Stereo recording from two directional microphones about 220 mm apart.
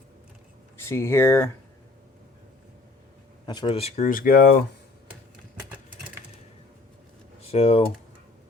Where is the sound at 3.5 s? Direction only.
20° left (ahead or behind); by 4.4 s 40° left (ahead or behind).